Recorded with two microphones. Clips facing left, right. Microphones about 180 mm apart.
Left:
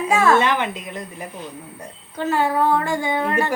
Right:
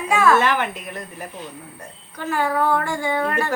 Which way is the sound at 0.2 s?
20° left (ahead or behind).